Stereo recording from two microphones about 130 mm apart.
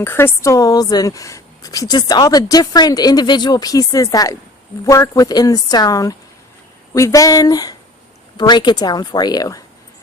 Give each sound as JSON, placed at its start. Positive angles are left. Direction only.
{"t": 0.0, "sound": "a woman's voice", "side_deg": 20}